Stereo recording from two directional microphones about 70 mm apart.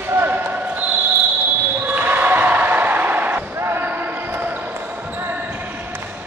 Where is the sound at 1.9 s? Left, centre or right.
Right.